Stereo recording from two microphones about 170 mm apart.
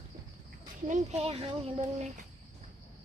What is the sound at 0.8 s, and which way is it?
Speech, 45° right (ahead or behind).